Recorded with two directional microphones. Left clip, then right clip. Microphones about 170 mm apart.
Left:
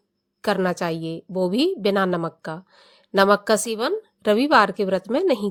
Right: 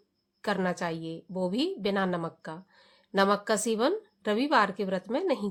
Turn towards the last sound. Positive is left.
turn(degrees=45)  # may be behind; listen again after turning